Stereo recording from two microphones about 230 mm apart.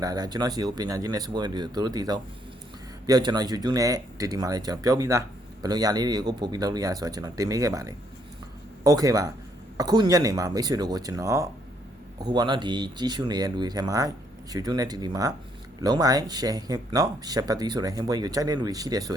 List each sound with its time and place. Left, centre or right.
0.0 s speech: centre